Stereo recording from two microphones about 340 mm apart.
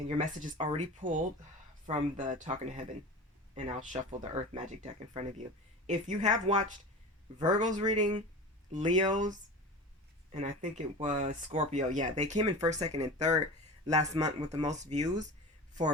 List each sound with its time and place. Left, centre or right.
0.2 s speech: centre